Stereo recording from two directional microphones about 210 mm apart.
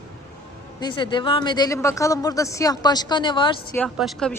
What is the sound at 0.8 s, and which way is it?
Speech, 20° left (ahead or behind).